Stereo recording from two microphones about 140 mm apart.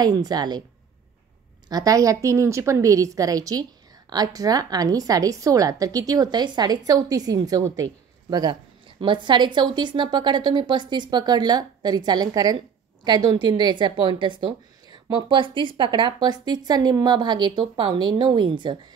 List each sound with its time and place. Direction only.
0.0 s a woman's voice: 30° right (ahead or behind)
1.7 s a woman's voice: 25° right (ahead or behind)